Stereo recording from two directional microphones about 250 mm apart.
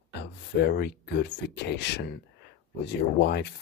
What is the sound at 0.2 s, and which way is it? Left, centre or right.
Speech, left.